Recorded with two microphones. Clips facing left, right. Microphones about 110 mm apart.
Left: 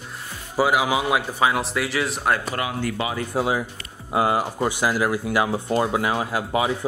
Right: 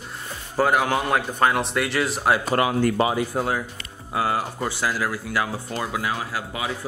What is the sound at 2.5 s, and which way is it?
Speech, 45° right (ahead or behind).